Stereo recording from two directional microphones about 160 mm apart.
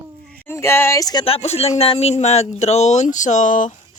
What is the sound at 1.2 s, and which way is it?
A man's voice, 40° left (ahead or behind).